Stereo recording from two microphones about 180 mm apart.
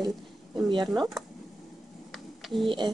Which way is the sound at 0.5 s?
25° right (ahead or behind).